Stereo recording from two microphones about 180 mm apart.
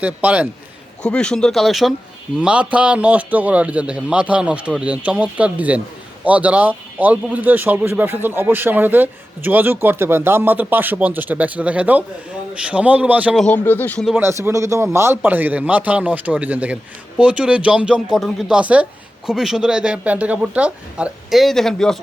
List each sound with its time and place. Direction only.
0.0 s a man's voice: 10° right (ahead or behind)
1.0 s a man's voice: 5° left (ahead or behind)
13.4 s speech: 10° left (ahead or behind)
14.2 s a man's voice: 15° right (ahead or behind); by 21.9 s centre (ahead or behind)